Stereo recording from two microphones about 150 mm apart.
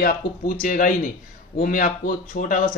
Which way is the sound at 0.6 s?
70° left (ahead or behind).